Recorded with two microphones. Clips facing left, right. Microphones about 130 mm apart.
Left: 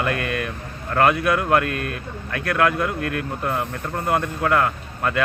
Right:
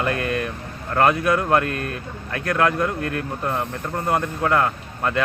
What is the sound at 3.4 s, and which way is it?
Speech, 15° left (ahead or behind).